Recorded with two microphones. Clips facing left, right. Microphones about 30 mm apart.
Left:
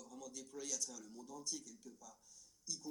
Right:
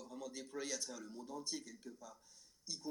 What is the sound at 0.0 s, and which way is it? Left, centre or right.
Speech, right.